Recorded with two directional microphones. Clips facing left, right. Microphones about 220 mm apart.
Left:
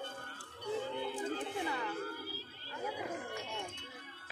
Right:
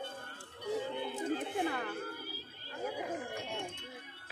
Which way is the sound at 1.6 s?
55° right (ahead or behind).